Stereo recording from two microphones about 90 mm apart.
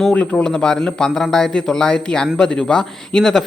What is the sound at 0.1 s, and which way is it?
A man's voice, 15° left (ahead or behind).